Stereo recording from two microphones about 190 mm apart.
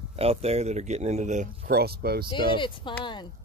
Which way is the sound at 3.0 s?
25° left (ahead or behind).